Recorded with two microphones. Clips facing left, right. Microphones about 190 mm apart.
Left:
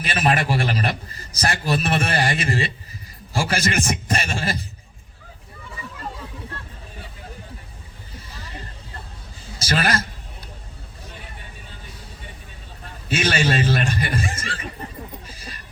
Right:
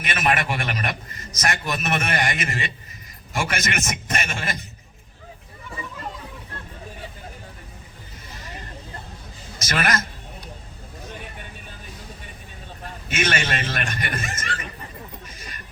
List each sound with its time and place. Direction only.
0.0 s a man's voice: 30° left (ahead or behind)
9.6 s a man's voice: 30° left (ahead or behind)
13.1 s a man's voice: 30° left (ahead or behind)
15.3 s music: 30° left (ahead or behind)